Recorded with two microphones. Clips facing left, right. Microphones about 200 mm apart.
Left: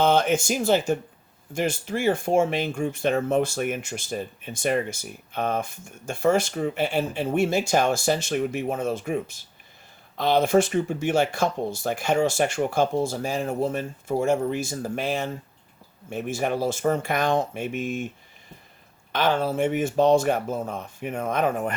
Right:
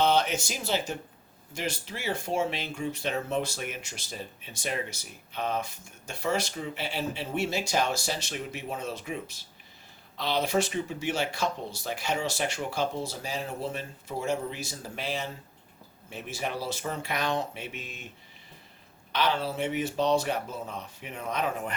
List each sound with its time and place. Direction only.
0.0 s speech: 50° left (ahead or behind)
19.1 s speech: 50° left (ahead or behind)